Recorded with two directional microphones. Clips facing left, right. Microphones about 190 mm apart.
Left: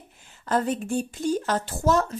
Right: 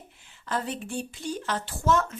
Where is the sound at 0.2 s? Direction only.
45° left (ahead or behind).